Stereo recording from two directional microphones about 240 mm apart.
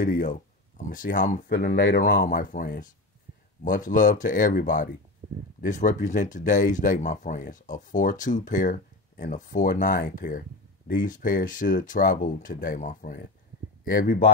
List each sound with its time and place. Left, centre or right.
0.0 s speech: left